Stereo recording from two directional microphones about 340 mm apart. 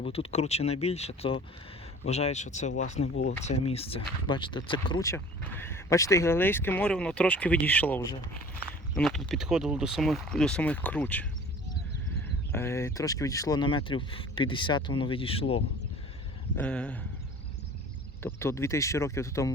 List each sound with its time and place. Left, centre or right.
0.0 s speech: centre
12.5 s speech: centre
16.6 s speech: centre
18.2 s speech: centre